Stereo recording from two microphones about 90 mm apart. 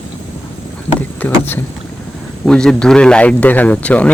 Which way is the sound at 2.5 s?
10° left (ahead or behind).